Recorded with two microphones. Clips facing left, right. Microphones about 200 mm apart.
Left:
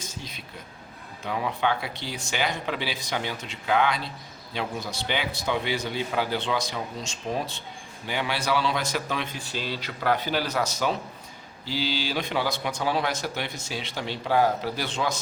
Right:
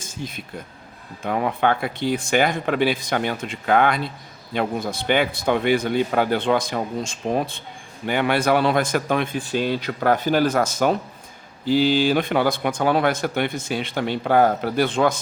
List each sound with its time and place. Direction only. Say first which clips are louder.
0.0 s air conditioning: right 7 dB; 50° right (ahead or behind)
1.2 s speech: right 6 dB; 55° right (ahead or behind)